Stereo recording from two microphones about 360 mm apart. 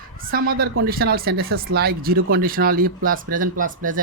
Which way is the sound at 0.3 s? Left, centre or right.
Right.